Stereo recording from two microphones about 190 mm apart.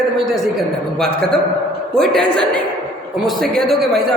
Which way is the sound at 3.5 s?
Centre (ahead or behind).